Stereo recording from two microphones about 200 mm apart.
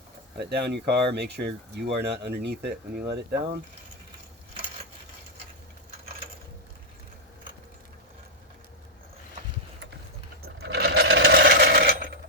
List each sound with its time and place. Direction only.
0.3 s speech: 55° right (ahead or behind)
10.4 s sewing machine: 55° right (ahead or behind)